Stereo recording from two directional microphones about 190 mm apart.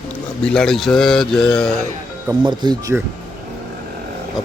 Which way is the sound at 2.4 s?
20° right (ahead or behind).